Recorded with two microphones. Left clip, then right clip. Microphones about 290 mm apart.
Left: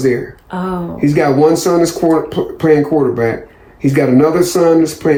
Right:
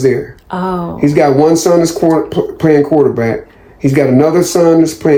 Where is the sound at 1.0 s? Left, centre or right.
Right.